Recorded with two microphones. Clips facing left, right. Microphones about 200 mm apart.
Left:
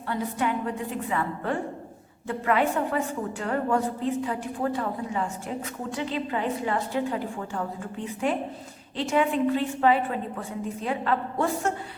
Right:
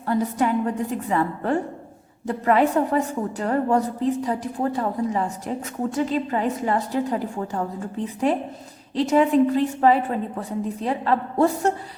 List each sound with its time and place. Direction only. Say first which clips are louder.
0.0 s a woman's voice: right 6 dB; 40° right (ahead or behind)